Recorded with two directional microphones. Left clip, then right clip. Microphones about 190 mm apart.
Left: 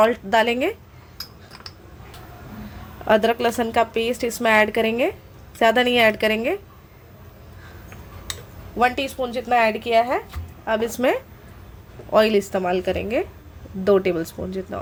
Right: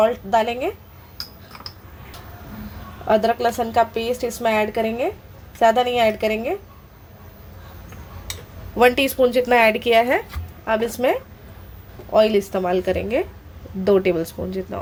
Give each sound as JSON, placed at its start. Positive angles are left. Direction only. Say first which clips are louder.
{"t": 0.0, "sound": "a woman's voice", "louder": "even", "side_deg": 30}
{"t": 3.1, "sound": "a woman's voice", "louder": "even", "side_deg": 20}
{"t": 8.8, "sound": "speech", "louder": "right 5 dB", "side_deg": -15}
{"t": 10.7, "sound": "a woman's voice", "louder": "right 1 dB", "side_deg": 5}